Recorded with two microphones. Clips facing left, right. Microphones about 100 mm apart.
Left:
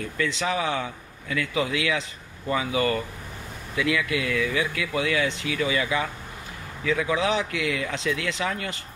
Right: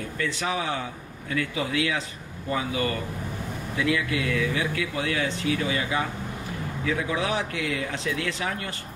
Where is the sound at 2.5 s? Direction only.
90° left.